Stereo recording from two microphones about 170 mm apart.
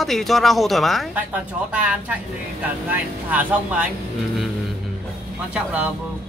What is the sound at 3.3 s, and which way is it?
Speech, 10° right (ahead or behind).